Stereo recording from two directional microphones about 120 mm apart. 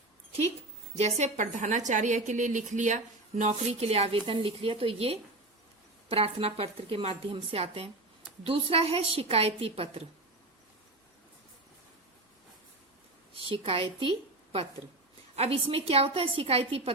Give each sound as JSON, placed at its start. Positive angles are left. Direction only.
{"t": 0.9, "sound": "a woman's voice", "side_deg": -60}
{"t": 13.5, "sound": "a woman's voice", "side_deg": -50}